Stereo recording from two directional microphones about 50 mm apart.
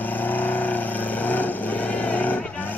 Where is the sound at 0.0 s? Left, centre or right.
Left.